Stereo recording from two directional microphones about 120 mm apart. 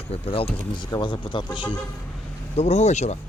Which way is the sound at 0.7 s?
40° left (ahead or behind).